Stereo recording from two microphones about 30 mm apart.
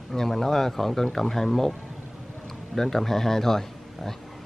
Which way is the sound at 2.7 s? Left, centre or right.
Centre.